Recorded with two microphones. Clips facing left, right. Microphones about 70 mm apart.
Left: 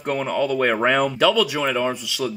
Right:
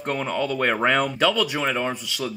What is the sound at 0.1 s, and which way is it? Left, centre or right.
Speech, centre.